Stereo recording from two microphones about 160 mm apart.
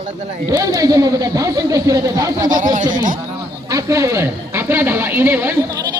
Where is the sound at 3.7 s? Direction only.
20° right (ahead or behind).